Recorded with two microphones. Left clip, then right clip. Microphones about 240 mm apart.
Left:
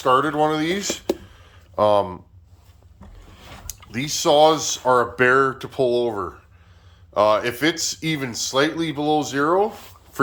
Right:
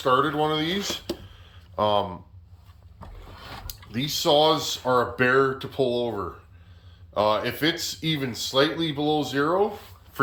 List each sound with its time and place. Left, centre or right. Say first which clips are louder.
0.0 s speech: left 4 dB; centre
3.7 s speech: left 3 dB; centre